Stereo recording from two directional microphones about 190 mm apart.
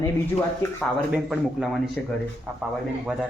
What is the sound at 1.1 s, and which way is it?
Speech, 5° right (ahead or behind).